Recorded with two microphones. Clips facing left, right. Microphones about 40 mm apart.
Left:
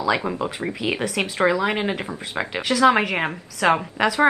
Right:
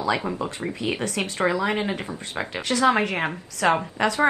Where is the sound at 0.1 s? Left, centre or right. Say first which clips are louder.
Left 3 dB; left.